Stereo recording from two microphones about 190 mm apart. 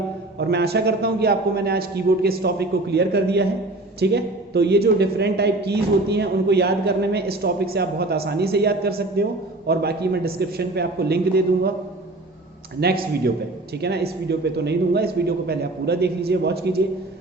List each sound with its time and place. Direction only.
0.3 s a woman's voice: 60° right (ahead or behind)
12.8 s a woman's voice: 55° right (ahead or behind)